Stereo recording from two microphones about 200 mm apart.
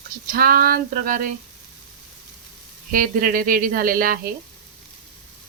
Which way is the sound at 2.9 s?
45° right (ahead or behind).